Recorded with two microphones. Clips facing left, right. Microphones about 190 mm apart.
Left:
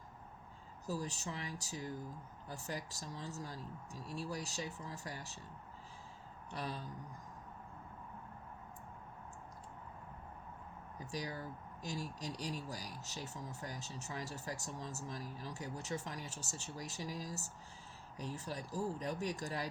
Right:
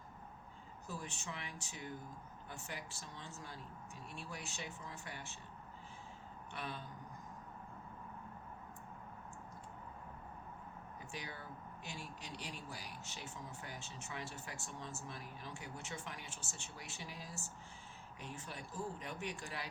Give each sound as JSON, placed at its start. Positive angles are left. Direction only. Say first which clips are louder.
{"t": 0.9, "sound": "speech", "louder": "left 6 dB", "side_deg": 40}
{"t": 6.5, "sound": "speech", "louder": "left 3 dB", "side_deg": 35}
{"t": 11.1, "sound": "speech", "louder": "left 7 dB", "side_deg": 40}